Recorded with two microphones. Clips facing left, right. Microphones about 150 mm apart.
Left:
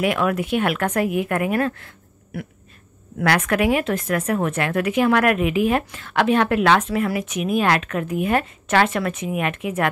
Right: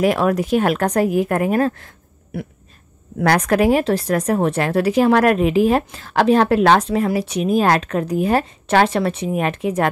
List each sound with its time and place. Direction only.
0.0 s speech: 35° right (ahead or behind)
3.3 s speech: 40° right (ahead or behind)